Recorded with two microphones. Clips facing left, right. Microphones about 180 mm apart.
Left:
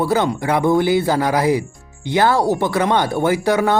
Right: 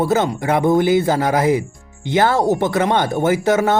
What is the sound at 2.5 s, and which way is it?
Speech, 50° right (ahead or behind).